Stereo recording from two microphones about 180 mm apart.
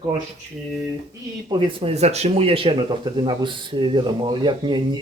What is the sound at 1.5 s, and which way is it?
Speech, 30° right (ahead or behind).